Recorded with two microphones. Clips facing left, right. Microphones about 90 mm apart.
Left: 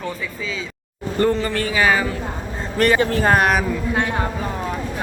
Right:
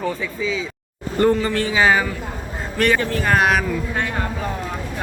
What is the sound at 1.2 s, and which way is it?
Speech, 15° right (ahead or behind).